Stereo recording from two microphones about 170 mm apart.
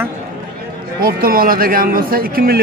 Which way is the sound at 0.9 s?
60° right (ahead or behind).